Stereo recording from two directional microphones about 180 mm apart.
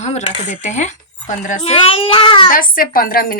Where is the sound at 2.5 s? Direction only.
50° left (ahead or behind).